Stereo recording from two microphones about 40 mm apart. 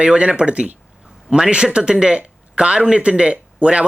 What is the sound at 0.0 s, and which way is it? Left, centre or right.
Speech, right.